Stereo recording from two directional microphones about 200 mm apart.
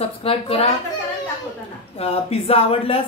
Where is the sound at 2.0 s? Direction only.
30° left (ahead or behind).